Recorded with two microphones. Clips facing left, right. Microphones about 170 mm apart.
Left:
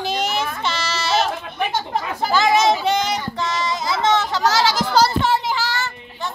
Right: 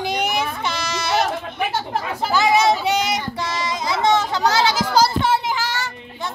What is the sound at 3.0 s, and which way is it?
Child singing, 10° right (ahead or behind).